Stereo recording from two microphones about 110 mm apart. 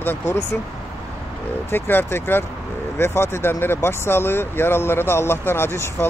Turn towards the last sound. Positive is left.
turn(degrees=20)  # may be behind; listen again after turning